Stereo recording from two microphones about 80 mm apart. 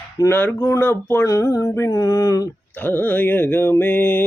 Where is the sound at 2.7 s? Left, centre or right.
Left.